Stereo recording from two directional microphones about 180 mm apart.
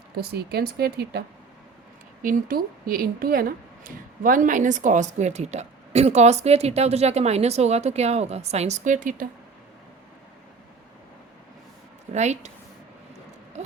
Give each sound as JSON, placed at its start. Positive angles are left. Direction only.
{"t": 0.2, "sound": "speech", "side_deg": -60}
{"t": 2.2, "sound": "speech", "side_deg": -50}
{"t": 12.1, "sound": "speech", "side_deg": -40}
{"t": 13.5, "sound": "owl", "side_deg": -40}